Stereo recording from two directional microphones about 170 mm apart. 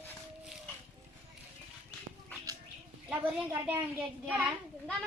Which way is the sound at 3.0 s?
10° right (ahead or behind).